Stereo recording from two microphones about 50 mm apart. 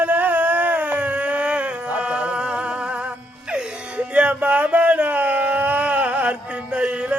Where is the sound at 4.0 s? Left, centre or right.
Right.